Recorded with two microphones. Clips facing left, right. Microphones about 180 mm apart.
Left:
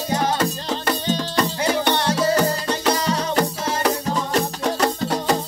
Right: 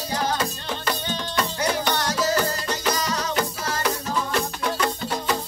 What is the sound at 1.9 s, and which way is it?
Music, 30° left (ahead or behind).